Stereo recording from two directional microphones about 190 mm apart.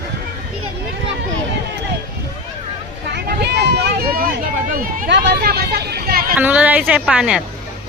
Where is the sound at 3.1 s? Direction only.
60° right (ahead or behind).